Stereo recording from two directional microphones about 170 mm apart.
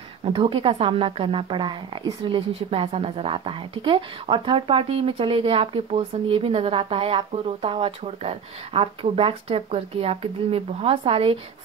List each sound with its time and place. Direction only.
0.2 s a woman's voice: 35° right (ahead or behind)